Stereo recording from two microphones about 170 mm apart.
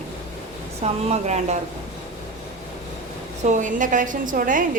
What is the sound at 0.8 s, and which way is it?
Speech, 40° right (ahead or behind).